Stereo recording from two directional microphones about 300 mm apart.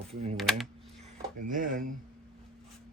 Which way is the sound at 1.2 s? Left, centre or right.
Right.